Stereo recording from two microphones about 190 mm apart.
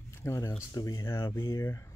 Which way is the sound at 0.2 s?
15° left (ahead or behind).